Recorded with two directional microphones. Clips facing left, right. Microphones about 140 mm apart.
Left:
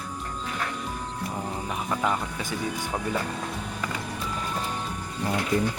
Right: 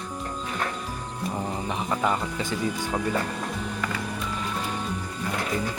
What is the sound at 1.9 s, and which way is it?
Music, 5° right (ahead or behind).